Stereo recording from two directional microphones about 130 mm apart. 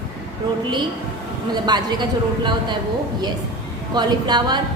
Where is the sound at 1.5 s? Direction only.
35° right (ahead or behind).